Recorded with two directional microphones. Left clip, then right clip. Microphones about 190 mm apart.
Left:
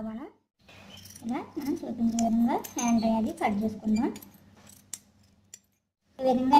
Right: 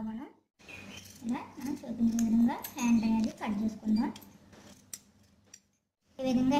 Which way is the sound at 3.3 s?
30° left (ahead or behind).